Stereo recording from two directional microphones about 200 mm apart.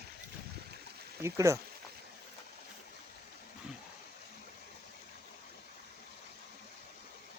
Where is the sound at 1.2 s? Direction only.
15° right (ahead or behind).